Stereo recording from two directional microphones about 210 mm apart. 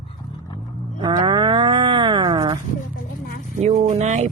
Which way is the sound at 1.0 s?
20° right (ahead or behind).